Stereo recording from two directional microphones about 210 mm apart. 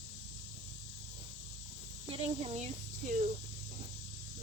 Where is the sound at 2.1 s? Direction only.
30° right (ahead or behind).